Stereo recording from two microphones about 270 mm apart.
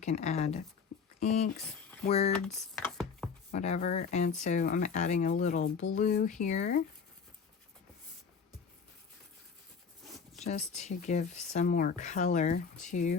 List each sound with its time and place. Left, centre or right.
0.0 s speech: left
2.8 s chopping: centre
3.5 s speech: left
10.4 s speech: left